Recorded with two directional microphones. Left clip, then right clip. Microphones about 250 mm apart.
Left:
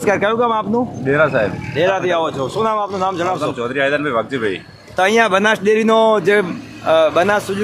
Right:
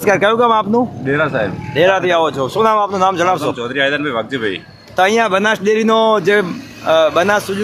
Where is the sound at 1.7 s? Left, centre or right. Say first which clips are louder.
Right 5 dB; centre.